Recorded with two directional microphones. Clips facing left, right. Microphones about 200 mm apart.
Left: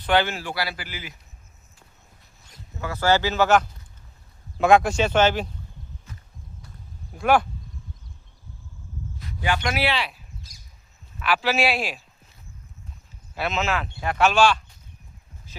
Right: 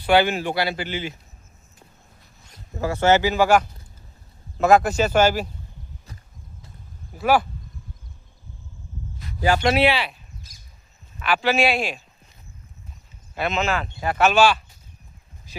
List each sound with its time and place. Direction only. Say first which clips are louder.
0.0 s speech: right 4 dB; 10° right (ahead or behind); by 1.1 s 25° right (ahead or behind)
2.7 s speech: right 3 dB; 30° right (ahead or behind); by 5.5 s 5° right (ahead or behind)
7.1 s speech: even; 5° right (ahead or behind)
9.4 s speech: right 6 dB; 40° right (ahead or behind)
9.9 s speech: right 2 dB; centre (ahead or behind)
11.2 s speech: right 2 dB; centre (ahead or behind)
13.3 s speech: right 2 dB; centre (ahead or behind)
15.5 s a sound: right 7 dB; 15° right (ahead or behind)